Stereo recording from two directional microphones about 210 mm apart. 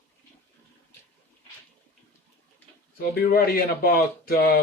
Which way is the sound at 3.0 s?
45° left (ahead or behind).